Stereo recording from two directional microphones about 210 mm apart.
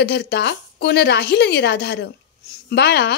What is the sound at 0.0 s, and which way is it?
A woman's voice, 50° left (ahead or behind).